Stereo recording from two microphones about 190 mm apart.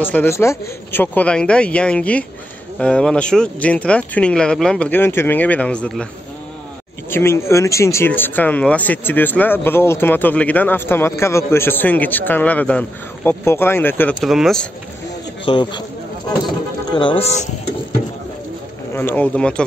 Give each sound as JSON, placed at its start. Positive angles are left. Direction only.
{"t": 0.0, "sound": "speech", "side_deg": 10}
{"t": 7.1, "sound": "speech", "side_deg": 15}
{"t": 14.2, "sound": "speech", "side_deg": 0}
{"t": 15.4, "sound": "a man's voice", "side_deg": 25}
{"t": 16.9, "sound": "speech", "side_deg": 25}
{"t": 18.9, "sound": "speech", "side_deg": 10}